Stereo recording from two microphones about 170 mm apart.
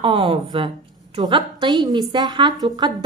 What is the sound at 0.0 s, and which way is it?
A woman's voice, 30° right (ahead or behind).